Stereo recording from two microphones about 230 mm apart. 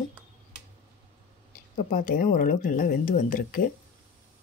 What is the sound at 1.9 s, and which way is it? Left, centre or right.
Speech, left.